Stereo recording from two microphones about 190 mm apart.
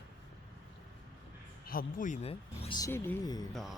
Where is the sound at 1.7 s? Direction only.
50° left (ahead or behind); by 2.8 s 30° left (ahead or behind).